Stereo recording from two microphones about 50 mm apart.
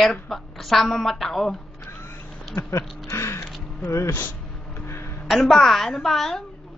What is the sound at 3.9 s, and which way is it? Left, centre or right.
Speech, left.